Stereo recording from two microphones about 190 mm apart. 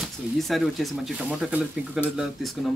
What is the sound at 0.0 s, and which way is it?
Speech, centre (ahead or behind).